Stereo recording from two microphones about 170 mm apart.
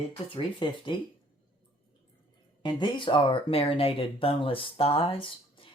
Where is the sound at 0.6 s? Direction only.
30° left (ahead or behind).